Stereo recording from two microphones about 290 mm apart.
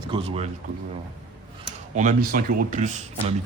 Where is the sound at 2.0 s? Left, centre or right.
Right.